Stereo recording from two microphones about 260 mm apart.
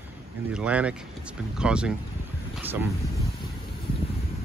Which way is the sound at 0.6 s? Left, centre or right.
Centre.